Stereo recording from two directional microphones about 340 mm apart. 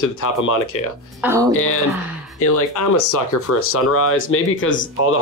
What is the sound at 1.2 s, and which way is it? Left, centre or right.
Speech, centre.